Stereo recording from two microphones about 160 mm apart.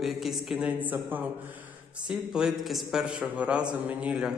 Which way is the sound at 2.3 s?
5° right (ahead or behind).